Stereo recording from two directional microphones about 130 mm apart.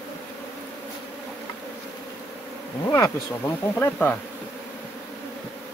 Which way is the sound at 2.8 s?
25° left (ahead or behind).